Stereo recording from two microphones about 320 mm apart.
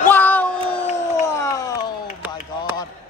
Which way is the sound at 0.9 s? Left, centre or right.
Left.